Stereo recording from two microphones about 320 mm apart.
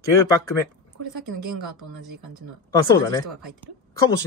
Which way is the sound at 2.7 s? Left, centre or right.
Centre.